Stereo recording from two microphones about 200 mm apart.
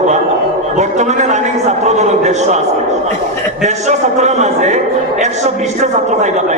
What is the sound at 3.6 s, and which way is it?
A man's voice, 35° right (ahead or behind).